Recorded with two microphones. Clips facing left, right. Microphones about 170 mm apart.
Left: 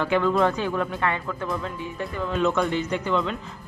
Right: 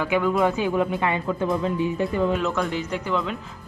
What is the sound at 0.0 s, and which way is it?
A woman's voice, 10° right (ahead or behind).